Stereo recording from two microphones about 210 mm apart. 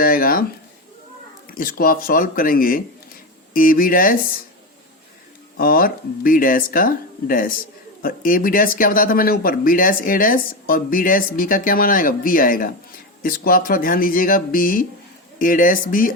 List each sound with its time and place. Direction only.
0.0 s a sound: 45° left (ahead or behind)
1.5 s speech: 45° left (ahead or behind)
5.5 s speech: 45° left (ahead or behind)